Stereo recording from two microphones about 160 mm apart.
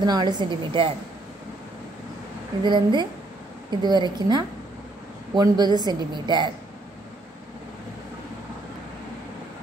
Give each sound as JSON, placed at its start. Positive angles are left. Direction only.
{"t": 0.0, "sound": "a woman's voice", "side_deg": -25}
{"t": 2.6, "sound": "a woman's voice", "side_deg": -30}